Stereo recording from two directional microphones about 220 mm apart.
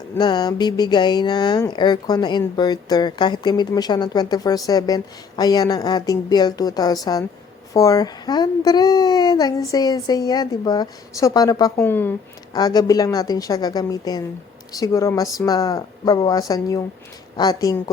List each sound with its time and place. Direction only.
0.2 s speech: 20° left (ahead or behind)